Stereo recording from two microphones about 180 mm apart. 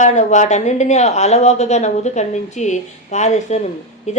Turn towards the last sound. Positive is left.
turn(degrees=40)  # may be behind; listen again after turning